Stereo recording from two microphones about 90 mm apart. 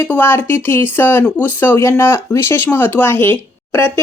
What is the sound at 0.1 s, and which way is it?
Speech, 25° left (ahead or behind).